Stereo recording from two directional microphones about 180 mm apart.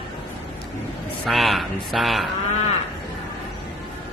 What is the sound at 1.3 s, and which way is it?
Speech, centre (ahead or behind).